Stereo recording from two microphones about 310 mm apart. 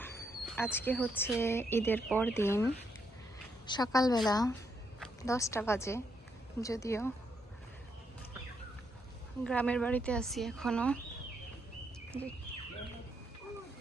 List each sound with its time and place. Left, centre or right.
0.0 s a sound: centre
1.1 s speech: centre
3.7 s speech: centre
9.4 s speech: centre